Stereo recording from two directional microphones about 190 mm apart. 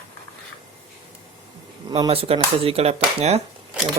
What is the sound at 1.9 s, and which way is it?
Speech, 30° right (ahead or behind).